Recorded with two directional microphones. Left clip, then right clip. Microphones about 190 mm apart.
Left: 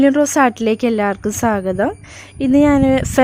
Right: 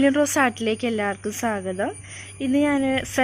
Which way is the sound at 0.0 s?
35° left (ahead or behind).